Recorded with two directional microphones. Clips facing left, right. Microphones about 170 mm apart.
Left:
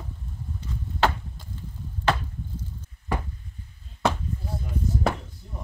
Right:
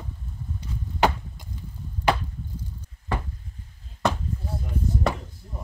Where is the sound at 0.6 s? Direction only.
15° right (ahead or behind).